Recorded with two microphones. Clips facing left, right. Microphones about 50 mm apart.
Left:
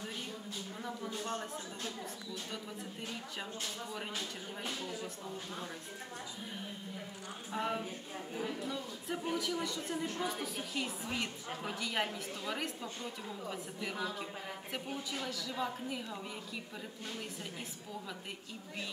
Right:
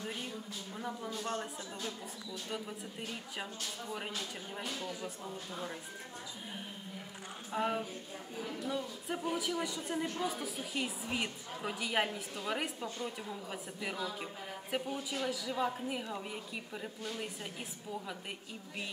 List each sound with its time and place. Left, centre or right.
1.2 s a woman's voice: centre
4.8 s a woman's voice: centre
7.5 s a woman's voice: centre
8.4 s speech: centre
8.6 s a woman's voice: centre
15.0 s a woman's voice: centre